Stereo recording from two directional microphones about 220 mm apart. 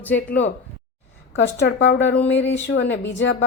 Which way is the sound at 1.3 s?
55° left (ahead or behind).